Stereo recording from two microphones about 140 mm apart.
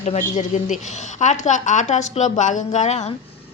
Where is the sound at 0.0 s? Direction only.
60° left (ahead or behind).